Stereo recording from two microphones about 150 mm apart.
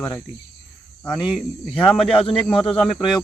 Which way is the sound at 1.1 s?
5° right (ahead or behind).